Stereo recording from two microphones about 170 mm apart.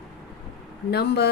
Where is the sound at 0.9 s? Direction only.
70° left (ahead or behind).